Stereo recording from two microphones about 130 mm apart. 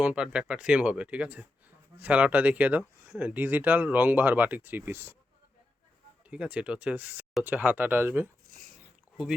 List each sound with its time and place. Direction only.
0.0 s speech: 10° right (ahead or behind)
6.3 s speech: 10° right (ahead or behind)
8.4 s a sound: 90° right